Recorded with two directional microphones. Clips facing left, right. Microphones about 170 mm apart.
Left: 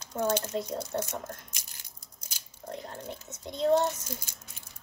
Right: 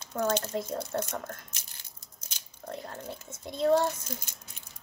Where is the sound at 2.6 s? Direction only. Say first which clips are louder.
Even; 30° left (ahead or behind).